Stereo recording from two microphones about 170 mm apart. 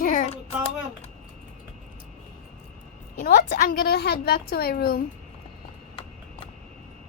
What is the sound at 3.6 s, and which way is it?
A woman's voice, 55° left (ahead or behind).